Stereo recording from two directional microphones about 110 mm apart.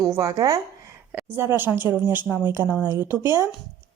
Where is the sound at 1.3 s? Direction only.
20° right (ahead or behind).